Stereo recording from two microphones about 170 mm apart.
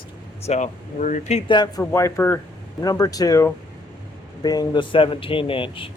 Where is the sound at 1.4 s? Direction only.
25° left (ahead or behind).